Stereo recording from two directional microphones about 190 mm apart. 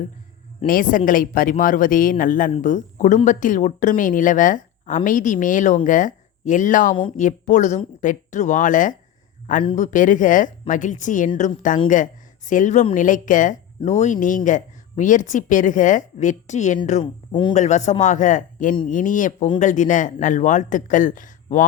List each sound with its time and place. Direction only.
0.6 s speech: 45° left (ahead or behind)
17.0 s speech: 25° left (ahead or behind)
17.5 s speech: 40° left (ahead or behind)